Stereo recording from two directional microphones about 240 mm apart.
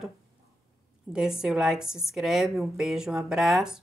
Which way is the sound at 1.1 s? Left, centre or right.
Centre.